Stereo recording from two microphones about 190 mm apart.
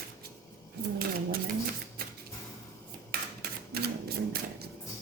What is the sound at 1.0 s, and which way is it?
Speech, 55° right (ahead or behind).